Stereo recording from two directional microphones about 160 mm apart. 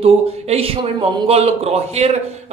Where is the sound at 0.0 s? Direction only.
35° right (ahead or behind).